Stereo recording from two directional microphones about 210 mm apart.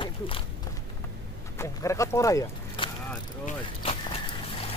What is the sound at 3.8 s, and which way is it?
Vehicle, 25° left (ahead or behind).